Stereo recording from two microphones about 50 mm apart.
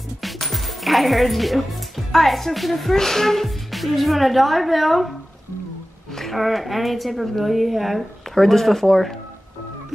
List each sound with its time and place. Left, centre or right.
0.2 s speech: centre
6.1 s a woman's voice: centre